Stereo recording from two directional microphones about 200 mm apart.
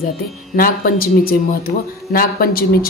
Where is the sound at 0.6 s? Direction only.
45° left (ahead or behind).